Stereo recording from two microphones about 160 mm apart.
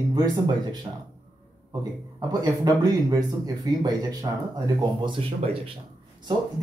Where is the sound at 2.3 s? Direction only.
25° right (ahead or behind).